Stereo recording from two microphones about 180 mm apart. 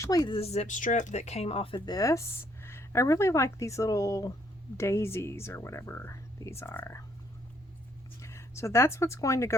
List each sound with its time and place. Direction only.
0.0 s speech: 20° left (ahead or behind)
0.3 s speech: 35° left (ahead or behind); by 7.0 s 15° left (ahead or behind)
8.2 s speech: 15° left (ahead or behind)